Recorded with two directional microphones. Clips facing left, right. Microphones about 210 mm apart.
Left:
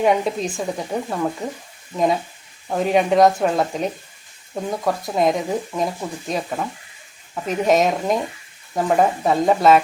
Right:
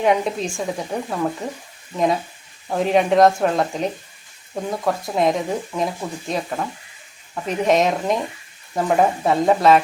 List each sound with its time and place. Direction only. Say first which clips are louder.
0.0 s speech: left 1 dB; centre (ahead or behind)
2.6 s speech: even; centre (ahead or behind)